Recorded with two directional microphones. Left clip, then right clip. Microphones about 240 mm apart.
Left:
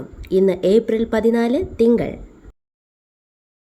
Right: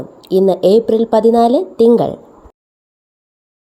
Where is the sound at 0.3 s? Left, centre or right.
Centre.